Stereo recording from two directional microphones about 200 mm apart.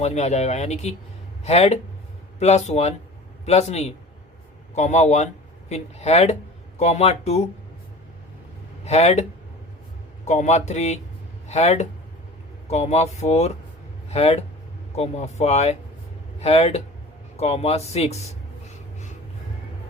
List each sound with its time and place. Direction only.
0.0 s speech: 35° left (ahead or behind)
8.8 s speech: 35° left (ahead or behind)
10.2 s speech: 35° left (ahead or behind)